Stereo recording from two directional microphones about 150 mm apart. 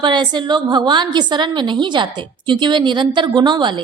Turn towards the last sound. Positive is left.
turn(degrees=-30)  # may be behind; listen again after turning